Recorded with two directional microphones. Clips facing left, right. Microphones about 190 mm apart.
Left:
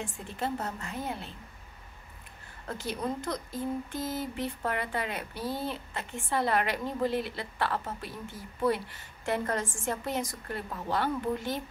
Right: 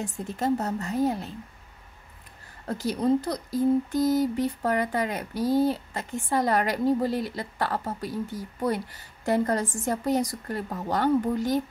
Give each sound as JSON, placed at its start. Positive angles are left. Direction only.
{"t": 0.0, "sound": "speech", "side_deg": -40}
{"t": 2.6, "sound": "speech", "side_deg": -40}